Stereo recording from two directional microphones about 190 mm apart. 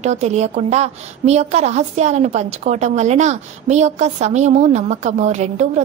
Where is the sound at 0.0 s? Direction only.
35° right (ahead or behind).